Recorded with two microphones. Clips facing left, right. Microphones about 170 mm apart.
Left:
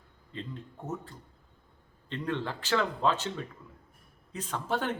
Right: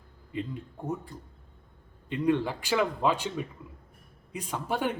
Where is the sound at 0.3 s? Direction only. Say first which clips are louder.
Right 6 dB; 10° right (ahead or behind).